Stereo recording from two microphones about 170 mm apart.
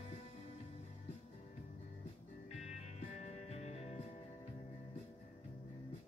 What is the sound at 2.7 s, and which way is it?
Music, 45° left (ahead or behind).